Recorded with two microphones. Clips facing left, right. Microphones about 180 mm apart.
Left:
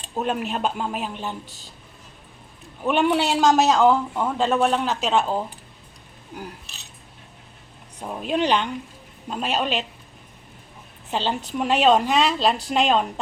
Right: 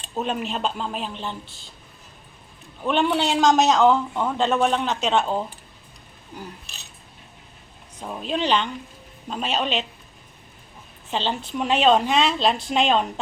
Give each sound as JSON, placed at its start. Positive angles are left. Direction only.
{"t": 0.1, "sound": "speech", "side_deg": 5}
{"t": 2.8, "sound": "a man's voice", "side_deg": 10}
{"t": 7.9, "sound": "speech", "side_deg": 10}
{"t": 11.1, "sound": "a man's voice", "side_deg": 10}